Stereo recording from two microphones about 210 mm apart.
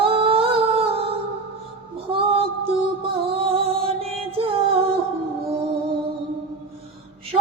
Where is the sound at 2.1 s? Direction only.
25° right (ahead or behind).